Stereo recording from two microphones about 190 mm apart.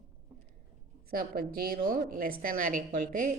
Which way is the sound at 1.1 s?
50° right (ahead or behind).